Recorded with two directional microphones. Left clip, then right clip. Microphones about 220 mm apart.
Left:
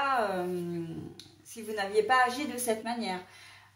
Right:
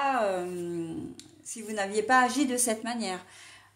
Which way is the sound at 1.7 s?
45° right (ahead or behind).